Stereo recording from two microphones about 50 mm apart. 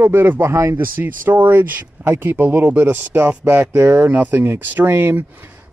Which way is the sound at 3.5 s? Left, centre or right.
Right.